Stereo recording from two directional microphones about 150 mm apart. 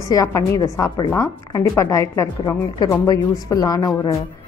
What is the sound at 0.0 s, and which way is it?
A woman's voice, 20° left (ahead or behind).